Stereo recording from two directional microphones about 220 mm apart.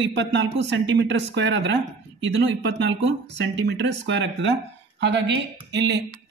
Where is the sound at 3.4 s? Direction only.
55° right (ahead or behind).